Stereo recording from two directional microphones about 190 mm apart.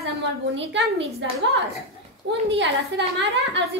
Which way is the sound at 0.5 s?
70° right (ahead or behind).